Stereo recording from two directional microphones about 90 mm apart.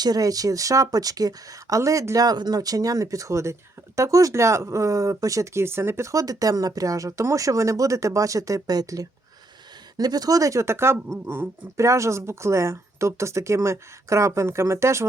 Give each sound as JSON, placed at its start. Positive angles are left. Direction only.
{"t": 0.0, "sound": "speech", "side_deg": -45}